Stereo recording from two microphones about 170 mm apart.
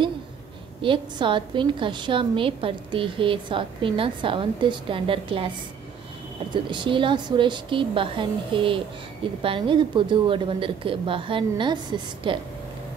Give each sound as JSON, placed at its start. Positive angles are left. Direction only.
{"t": 0.8, "sound": "a woman's voice", "side_deg": -30}
{"t": 6.5, "sound": "a woman's voice", "side_deg": -30}